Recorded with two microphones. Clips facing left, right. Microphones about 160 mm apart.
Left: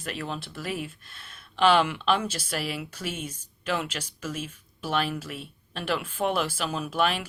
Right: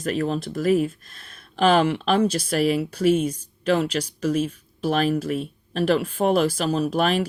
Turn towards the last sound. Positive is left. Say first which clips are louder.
# right 6 dB
turn(degrees=-40)  # may be behind; listen again after turning